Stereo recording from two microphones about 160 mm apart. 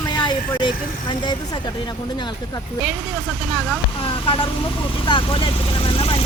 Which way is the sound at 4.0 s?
35° left (ahead or behind).